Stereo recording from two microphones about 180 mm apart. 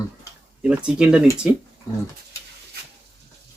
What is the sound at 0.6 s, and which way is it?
Speech, 5° right (ahead or behind).